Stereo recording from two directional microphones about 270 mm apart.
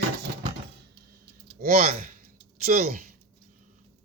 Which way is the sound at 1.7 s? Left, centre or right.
Right.